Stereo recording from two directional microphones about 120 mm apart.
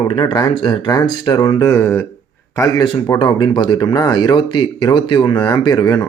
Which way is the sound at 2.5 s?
30° left (ahead or behind).